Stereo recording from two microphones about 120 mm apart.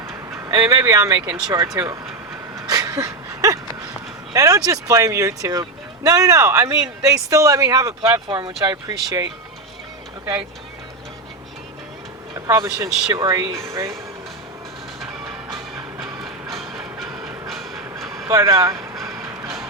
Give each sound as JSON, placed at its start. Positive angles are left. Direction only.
{"t": 0.1, "sound": "a sound", "side_deg": -25}
{"t": 0.7, "sound": "speech", "side_deg": -30}
{"t": 2.6, "sound": "a sound", "side_deg": -30}
{"t": 4.4, "sound": "speech", "side_deg": -30}
{"t": 12.3, "sound": "speech", "side_deg": -30}
{"t": 16.2, "sound": "train", "side_deg": 0}
{"t": 18.3, "sound": "speech", "side_deg": -30}
{"t": 19.0, "sound": "music", "side_deg": -25}